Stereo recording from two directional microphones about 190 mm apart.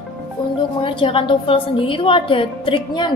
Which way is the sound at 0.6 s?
25° left (ahead or behind).